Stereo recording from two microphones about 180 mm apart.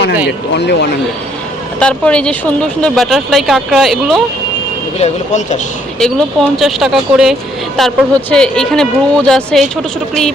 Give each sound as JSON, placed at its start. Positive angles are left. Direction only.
{"t": 0.3, "sound": "speech", "side_deg": 70}
{"t": 1.8, "sound": "speech", "side_deg": 5}
{"t": 4.9, "sound": "speech", "side_deg": 40}
{"t": 6.0, "sound": "speech", "side_deg": 5}